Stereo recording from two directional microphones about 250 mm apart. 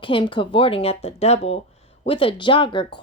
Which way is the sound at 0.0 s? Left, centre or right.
Centre.